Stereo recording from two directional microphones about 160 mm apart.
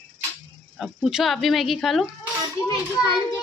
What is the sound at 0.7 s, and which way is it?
Speech, centre (ahead or behind).